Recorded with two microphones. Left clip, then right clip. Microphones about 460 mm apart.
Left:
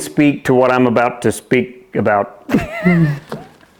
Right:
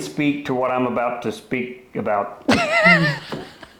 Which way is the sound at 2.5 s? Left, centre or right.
Right.